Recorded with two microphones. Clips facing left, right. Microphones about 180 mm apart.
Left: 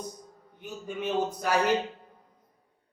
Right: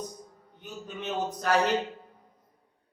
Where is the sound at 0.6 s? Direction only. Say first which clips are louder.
Left 4 dB; 10° left (ahead or behind).